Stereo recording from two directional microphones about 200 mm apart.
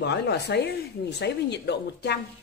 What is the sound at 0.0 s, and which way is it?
Speech, 55° left (ahead or behind).